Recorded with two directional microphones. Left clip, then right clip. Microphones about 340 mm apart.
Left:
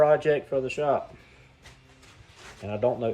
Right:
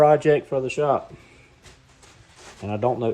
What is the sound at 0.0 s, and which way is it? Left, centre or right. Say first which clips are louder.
Speech: right 4 dB; centre.